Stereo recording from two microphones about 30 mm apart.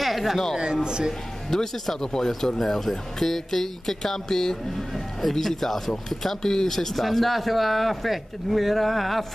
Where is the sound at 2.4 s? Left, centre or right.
Centre.